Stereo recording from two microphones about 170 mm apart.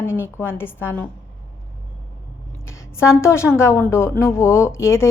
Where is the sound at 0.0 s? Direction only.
15° left (ahead or behind).